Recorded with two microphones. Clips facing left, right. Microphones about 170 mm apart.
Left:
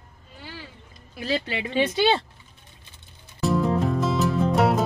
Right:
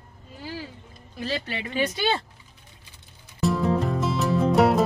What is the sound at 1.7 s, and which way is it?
Speech, 30° left (ahead or behind).